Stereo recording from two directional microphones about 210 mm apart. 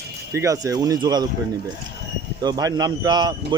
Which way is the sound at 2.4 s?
20° right (ahead or behind).